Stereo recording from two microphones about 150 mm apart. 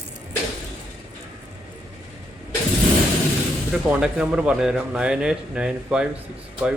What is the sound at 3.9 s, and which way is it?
Speech, 5° right (ahead or behind).